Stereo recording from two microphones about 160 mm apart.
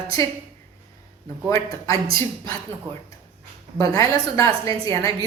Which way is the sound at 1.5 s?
20° left (ahead or behind).